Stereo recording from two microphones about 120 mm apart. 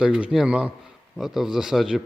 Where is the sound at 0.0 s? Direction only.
10° right (ahead or behind).